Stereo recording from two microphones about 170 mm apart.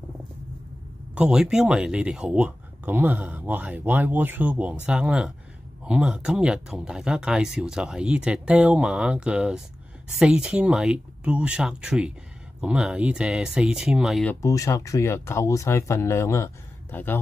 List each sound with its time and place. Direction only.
1.1 s speech: 5° right (ahead or behind)
14.2 s speech: 20° left (ahead or behind)